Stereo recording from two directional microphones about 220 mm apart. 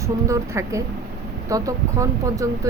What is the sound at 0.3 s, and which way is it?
Speech, 15° right (ahead or behind).